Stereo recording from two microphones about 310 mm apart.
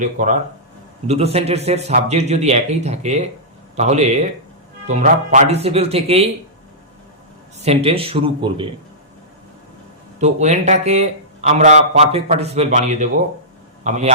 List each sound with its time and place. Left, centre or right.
0.0 s a man's voice: right
7.6 s speech: centre
10.2 s a man's voice: right